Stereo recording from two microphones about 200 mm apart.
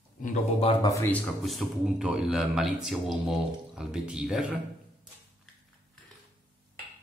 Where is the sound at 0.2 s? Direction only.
40° left (ahead or behind).